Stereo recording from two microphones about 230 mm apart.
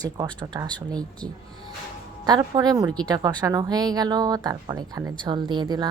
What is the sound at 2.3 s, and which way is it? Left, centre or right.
A woman's voice, centre.